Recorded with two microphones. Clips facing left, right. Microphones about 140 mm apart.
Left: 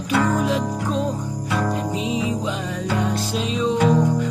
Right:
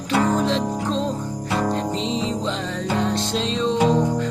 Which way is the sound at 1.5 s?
25° right (ahead or behind).